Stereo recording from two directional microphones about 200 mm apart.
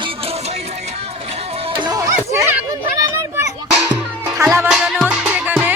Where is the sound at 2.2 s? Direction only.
10° right (ahead or behind).